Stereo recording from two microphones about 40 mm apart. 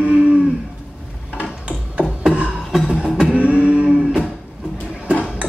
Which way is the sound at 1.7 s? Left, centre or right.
Right.